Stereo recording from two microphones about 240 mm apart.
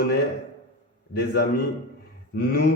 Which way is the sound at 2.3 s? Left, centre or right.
Left.